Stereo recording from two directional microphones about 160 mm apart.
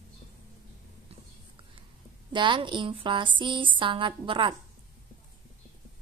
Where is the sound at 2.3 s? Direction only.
30° right (ahead or behind).